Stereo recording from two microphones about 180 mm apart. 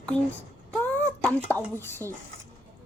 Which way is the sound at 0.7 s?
10° left (ahead or behind).